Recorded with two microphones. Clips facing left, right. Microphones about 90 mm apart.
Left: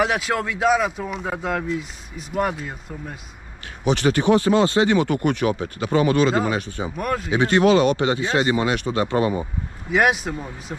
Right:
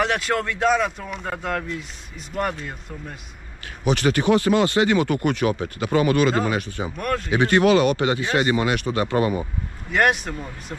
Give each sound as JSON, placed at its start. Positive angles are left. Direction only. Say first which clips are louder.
{"t": 0.0, "sound": "speech", "louder": "left 1 dB", "side_deg": 5}
{"t": 3.6, "sound": "speech", "louder": "left 1 dB", "side_deg": 25}
{"t": 7.0, "sound": "speech", "louder": "left 1 dB", "side_deg": 5}
{"t": 7.3, "sound": "speech", "louder": "left 1 dB", "side_deg": 25}
{"t": 9.8, "sound": "speech", "louder": "left 1 dB", "side_deg": 5}